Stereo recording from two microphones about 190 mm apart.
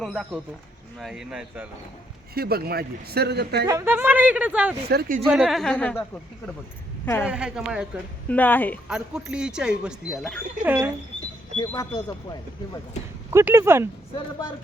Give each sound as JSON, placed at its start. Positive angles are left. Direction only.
{"t": 0.0, "sound": "speech", "side_deg": 0}
{"t": 2.3, "sound": "speech", "side_deg": -55}
{"t": 3.7, "sound": "speech", "side_deg": -15}
{"t": 4.9, "sound": "speech", "side_deg": -60}
{"t": 5.3, "sound": "speech", "side_deg": 0}
{"t": 7.3, "sound": "speech", "side_deg": -5}
{"t": 8.3, "sound": "speech", "side_deg": 10}
{"t": 8.9, "sound": "speech", "side_deg": -5}
{"t": 10.7, "sound": "speech", "side_deg": -10}
{"t": 11.5, "sound": "speech", "side_deg": 20}
{"t": 13.3, "sound": "speech", "side_deg": -15}